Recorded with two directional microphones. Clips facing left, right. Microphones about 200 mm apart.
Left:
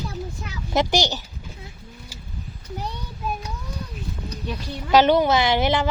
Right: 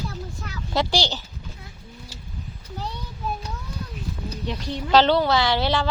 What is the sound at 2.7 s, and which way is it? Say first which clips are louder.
Child singing: left 1 dB; 15° left (ahead or behind).